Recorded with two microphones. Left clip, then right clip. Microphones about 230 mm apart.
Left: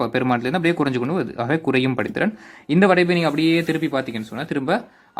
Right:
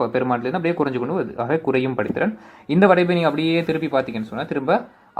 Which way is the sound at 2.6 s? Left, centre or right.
Left.